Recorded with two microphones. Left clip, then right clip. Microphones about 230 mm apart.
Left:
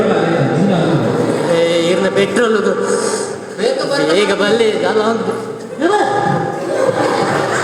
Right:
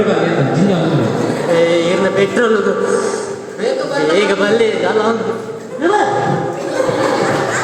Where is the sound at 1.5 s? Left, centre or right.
Left.